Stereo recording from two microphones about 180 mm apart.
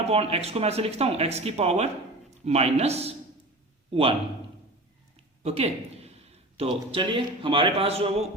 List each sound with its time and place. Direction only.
0.1 s speech: 35° right (ahead or behind)
5.4 s a man's voice: 35° right (ahead or behind)